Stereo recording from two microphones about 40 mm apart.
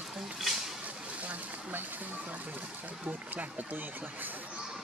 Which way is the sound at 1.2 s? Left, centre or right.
Right.